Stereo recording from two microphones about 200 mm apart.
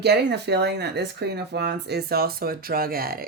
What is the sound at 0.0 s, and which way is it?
Speech, 55° right (ahead or behind).